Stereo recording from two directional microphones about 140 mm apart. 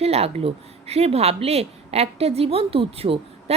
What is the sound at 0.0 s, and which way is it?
A woman's voice, 45° right (ahead or behind).